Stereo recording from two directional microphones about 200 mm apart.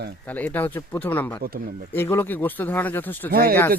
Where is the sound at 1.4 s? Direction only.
50° right (ahead or behind).